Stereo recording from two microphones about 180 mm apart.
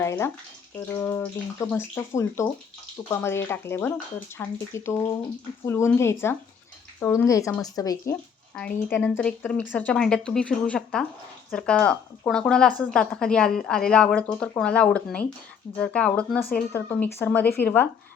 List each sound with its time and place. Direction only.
0.0 s speech: 15° left (ahead or behind)
8.5 s a woman's voice: 5° left (ahead or behind)